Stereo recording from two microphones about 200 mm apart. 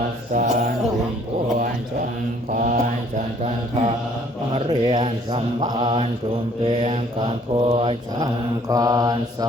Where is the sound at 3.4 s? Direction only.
35° right (ahead or behind).